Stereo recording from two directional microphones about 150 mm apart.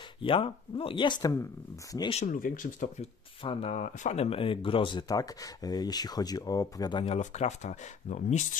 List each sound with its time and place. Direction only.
0.2 s speech: 35° left (ahead or behind)
2.2 s speech: 65° left (ahead or behind)
3.4 s speech: 45° left (ahead or behind)
7.2 s speech: 50° left (ahead or behind)